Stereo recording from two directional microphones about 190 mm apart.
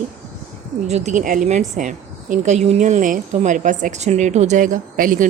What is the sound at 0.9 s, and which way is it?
A woman's voice, 35° right (ahead or behind).